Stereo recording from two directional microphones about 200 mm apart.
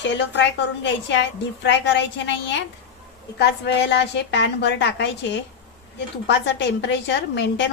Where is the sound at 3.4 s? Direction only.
60° left (ahead or behind).